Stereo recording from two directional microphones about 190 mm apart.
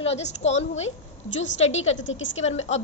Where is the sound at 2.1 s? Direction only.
80° left.